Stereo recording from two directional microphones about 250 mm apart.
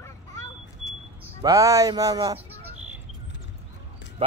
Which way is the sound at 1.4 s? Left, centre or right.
Centre.